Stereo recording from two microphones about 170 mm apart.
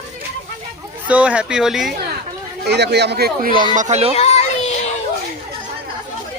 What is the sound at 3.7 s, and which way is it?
Speech, 45° right (ahead or behind).